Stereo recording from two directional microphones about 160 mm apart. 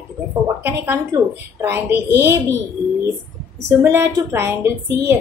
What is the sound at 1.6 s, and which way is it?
Speech, 15° right (ahead or behind).